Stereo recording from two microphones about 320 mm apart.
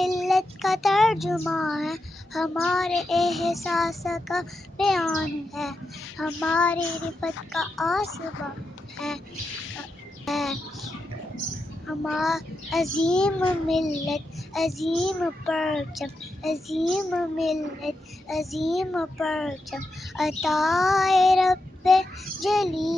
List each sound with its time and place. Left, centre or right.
0.0 s child singing: centre
8.9 s a sound: centre
10.2 s bird: centre
12.1 s child singing: centre